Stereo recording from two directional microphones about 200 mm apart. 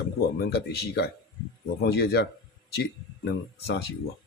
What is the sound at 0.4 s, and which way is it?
Speech, 55° left (ahead or behind).